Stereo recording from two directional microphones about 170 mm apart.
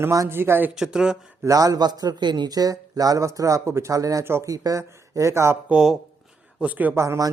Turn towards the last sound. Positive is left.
turn(degrees=-15)  # may be behind; listen again after turning